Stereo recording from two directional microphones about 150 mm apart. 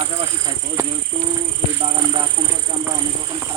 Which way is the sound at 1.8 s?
35° right (ahead or behind).